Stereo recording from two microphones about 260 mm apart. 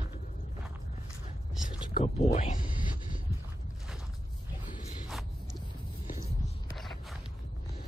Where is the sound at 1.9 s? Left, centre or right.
Left.